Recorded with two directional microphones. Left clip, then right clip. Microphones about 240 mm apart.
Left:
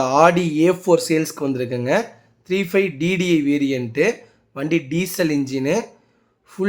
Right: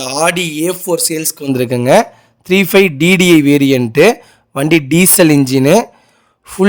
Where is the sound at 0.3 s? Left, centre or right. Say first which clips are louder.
Right 1 dB; right.